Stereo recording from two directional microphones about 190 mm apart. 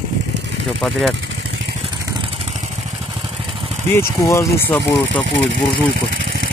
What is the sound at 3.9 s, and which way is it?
Speech, 15° left (ahead or behind).